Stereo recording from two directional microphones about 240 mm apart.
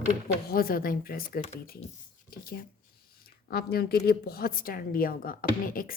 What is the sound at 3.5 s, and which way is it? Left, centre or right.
Speech, left.